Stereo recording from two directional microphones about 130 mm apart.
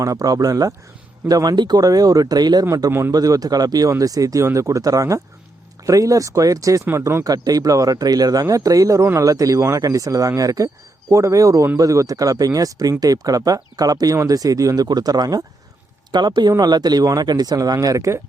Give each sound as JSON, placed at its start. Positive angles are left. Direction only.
{"t": 0.0, "sound": "speech", "side_deg": -25}